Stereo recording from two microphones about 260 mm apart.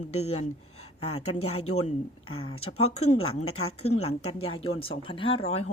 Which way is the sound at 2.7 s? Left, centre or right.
Left.